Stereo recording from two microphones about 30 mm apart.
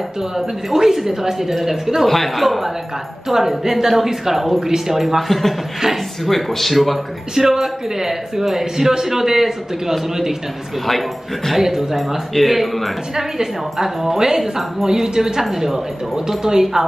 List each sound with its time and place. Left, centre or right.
0.7 s speech: centre
2.0 s speech: centre
5.0 s speech: centre
7.3 s speech: centre
10.9 s speech: centre
11.5 s speech: centre
12.4 s speech: centre